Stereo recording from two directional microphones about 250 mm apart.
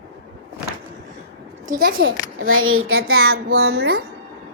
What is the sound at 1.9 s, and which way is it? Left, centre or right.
Speech, right.